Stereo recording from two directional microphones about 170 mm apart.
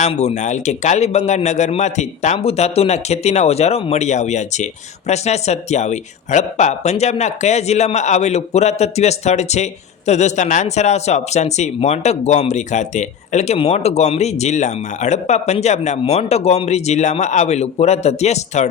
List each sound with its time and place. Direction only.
0.0 s a man's voice: 40° left (ahead or behind)